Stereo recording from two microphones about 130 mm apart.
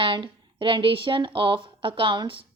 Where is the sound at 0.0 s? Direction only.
40° right (ahead or behind).